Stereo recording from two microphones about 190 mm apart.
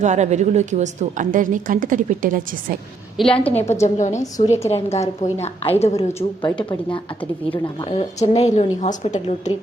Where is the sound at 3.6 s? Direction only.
35° left (ahead or behind).